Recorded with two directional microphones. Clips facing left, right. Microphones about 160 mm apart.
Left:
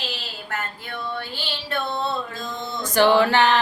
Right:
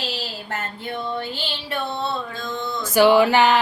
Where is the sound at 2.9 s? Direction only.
10° right (ahead or behind).